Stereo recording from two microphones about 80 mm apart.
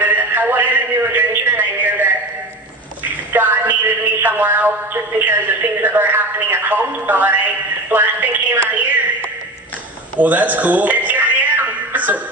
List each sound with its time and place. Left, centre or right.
0.0 s a man's voice: right
0.9 s a sound: right
10.2 s music: centre